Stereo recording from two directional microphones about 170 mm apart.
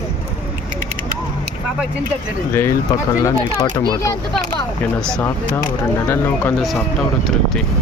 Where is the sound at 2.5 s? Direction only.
15° left (ahead or behind).